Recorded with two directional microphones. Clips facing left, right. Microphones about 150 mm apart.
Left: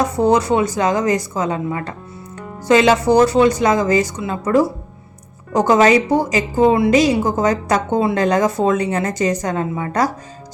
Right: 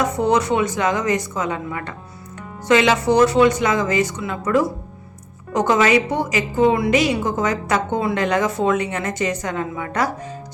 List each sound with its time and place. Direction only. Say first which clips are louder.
0.0 s a woman's voice: left 3 dB; 35° left (ahead or behind)